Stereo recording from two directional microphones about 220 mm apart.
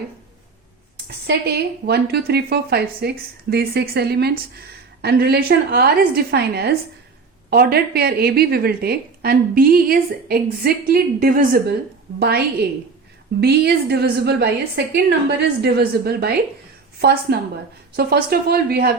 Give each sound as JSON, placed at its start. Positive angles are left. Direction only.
{"t": 1.3, "sound": "a woman's voice", "side_deg": -45}